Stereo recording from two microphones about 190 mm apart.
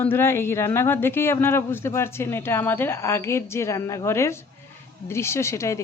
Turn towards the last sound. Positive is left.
turn(degrees=15)  # may be behind; listen again after turning